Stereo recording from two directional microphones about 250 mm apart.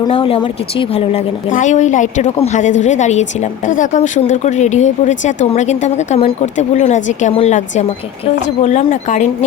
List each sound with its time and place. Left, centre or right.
0.0 s a woman's voice: left